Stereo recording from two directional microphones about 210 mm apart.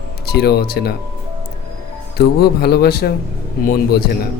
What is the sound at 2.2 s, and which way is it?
Speech, 50° left (ahead or behind).